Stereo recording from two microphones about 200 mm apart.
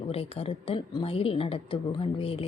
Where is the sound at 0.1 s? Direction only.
30° left (ahead or behind).